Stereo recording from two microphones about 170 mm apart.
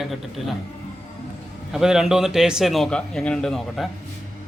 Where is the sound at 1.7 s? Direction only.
5° right (ahead or behind).